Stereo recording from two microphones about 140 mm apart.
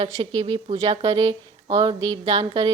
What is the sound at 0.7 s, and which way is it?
Speech, 50° right (ahead or behind).